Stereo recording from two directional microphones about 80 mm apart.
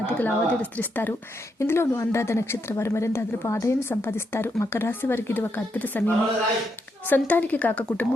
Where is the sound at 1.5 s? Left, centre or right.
Left.